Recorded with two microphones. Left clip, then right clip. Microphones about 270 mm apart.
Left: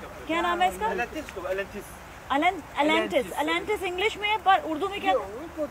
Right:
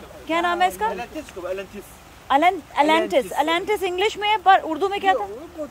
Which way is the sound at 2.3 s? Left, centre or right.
Centre.